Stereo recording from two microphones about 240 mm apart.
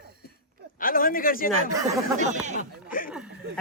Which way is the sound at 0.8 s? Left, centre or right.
Left.